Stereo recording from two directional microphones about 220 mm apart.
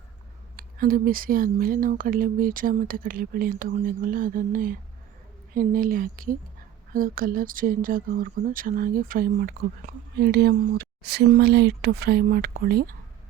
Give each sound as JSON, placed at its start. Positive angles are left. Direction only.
{"t": 0.5, "sound": "speech", "side_deg": -40}